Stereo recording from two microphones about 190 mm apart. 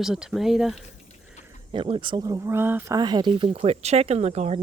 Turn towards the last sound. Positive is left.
turn(degrees=-35)  # may be behind; listen again after turning